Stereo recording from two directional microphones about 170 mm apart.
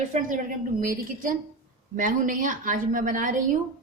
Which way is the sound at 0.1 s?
50° right (ahead or behind).